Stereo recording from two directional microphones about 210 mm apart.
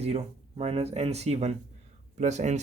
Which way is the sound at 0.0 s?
30° right (ahead or behind).